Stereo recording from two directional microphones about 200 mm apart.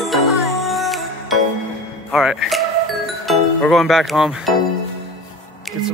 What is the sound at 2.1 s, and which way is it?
Speech, centre (ahead or behind).